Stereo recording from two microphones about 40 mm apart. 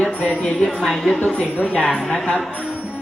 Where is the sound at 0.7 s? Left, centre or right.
Centre.